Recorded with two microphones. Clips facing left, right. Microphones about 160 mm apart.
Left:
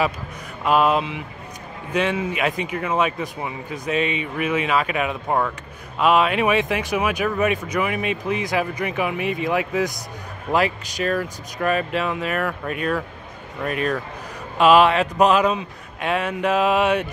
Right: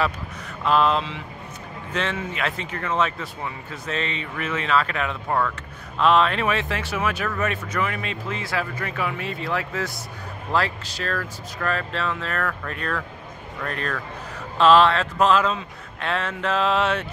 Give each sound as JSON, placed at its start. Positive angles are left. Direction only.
{"t": 0.7, "sound": "speech", "side_deg": 15}